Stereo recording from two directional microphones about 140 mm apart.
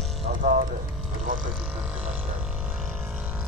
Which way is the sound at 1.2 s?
65° right (ahead or behind).